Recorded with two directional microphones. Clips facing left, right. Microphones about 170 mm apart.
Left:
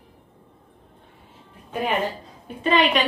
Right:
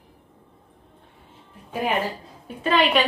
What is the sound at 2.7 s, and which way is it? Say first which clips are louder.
Speech: even; centre (ahead or behind).